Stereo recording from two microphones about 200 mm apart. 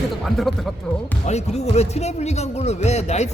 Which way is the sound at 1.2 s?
35° left (ahead or behind).